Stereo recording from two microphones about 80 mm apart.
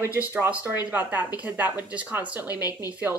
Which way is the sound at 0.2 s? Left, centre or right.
Right.